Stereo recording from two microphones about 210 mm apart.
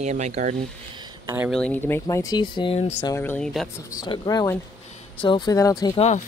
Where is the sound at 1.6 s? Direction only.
10° left (ahead or behind).